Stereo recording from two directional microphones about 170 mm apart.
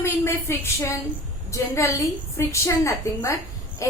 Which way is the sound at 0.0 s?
15° left (ahead or behind).